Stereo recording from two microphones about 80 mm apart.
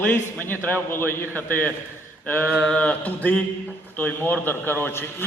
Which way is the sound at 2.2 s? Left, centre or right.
Centre.